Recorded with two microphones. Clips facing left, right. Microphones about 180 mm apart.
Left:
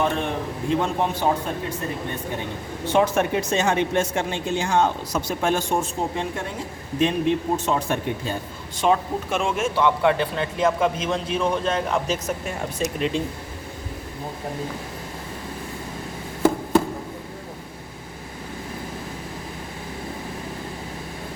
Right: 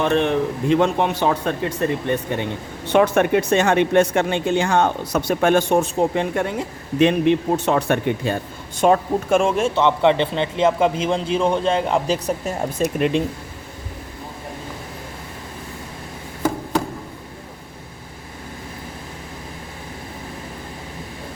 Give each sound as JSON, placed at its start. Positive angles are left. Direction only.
{"t": 0.0, "sound": "a man's voice", "side_deg": -75}
{"t": 2.8, "sound": "speech", "side_deg": -65}
{"t": 8.8, "sound": "speech", "side_deg": -50}
{"t": 12.8, "sound": "speech", "side_deg": -60}